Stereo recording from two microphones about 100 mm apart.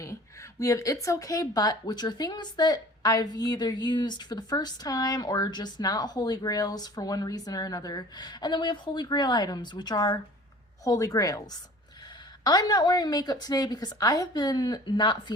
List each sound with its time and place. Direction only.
0.6 s speech: 35° left (ahead or behind); by 15.2 s 50° left (ahead or behind)